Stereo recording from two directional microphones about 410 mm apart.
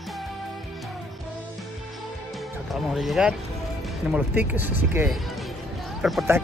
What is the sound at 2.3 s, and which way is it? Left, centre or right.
Speech, centre.